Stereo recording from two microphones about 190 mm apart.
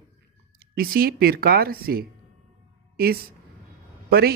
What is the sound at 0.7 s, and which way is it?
Speech, 50° right (ahead or behind).